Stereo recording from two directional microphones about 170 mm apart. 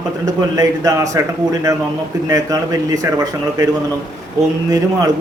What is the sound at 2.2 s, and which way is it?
A man's voice, 20° right (ahead or behind).